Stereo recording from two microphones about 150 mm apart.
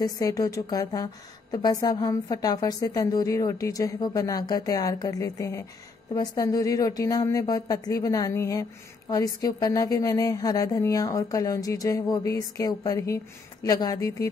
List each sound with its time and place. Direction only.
0.0 s a woman's voice: 25° left (ahead or behind)